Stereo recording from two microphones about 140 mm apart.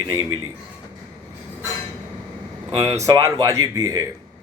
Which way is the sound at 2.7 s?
20° right (ahead or behind).